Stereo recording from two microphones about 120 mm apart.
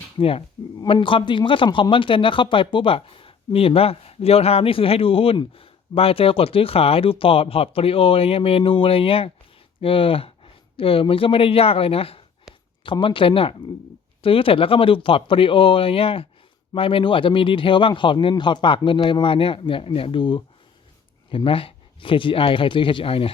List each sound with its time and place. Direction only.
0.2 s speech: 50° left (ahead or behind)
12.5 s a sound: 5° right (ahead or behind)
12.8 s speech: 45° left (ahead or behind)